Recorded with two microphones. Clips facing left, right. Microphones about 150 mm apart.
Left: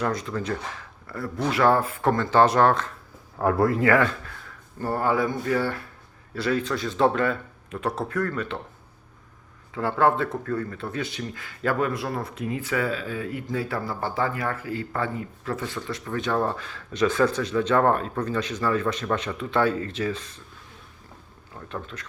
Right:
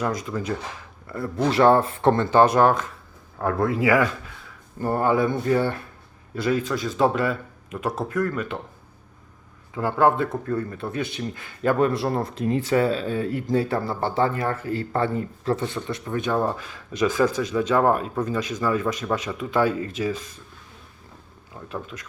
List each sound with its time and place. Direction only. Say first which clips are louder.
0.0 s speech: right 1 dB; 10° right (ahead or behind)
1.0 s speech: right 4 dB; 25° right (ahead or behind)
2.6 s speech: right 1 dB; 15° right (ahead or behind)
3.3 s speech: left 2 dB; 5° left (ahead or behind); by 8.4 s 15° right (ahead or behind)
9.7 s speech: right 2 dB; 15° right (ahead or behind)
21.7 s speech: right 2 dB; 10° right (ahead or behind)